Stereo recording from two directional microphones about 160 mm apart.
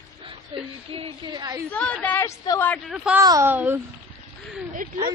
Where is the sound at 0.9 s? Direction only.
35° right (ahead or behind).